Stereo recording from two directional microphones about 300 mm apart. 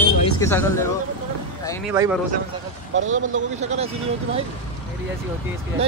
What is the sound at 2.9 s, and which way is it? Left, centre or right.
Speech, right.